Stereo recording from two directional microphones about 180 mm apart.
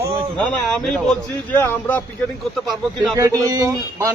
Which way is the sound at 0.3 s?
5° left (ahead or behind).